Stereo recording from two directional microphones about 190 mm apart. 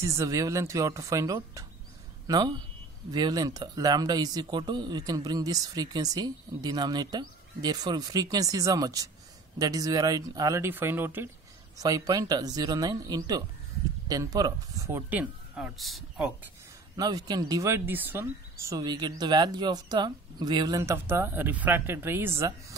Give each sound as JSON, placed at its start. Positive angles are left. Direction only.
{"t": 0.0, "sound": "speech", "side_deg": -15}
{"t": 16.9, "sound": "speech", "side_deg": -20}